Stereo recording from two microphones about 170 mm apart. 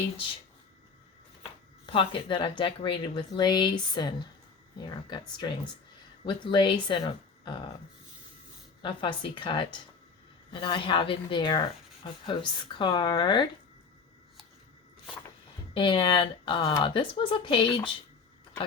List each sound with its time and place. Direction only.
1.9 s speech: 30° left (ahead or behind)
8.8 s speech: 30° left (ahead or behind)
15.7 s speech: 30° left (ahead or behind)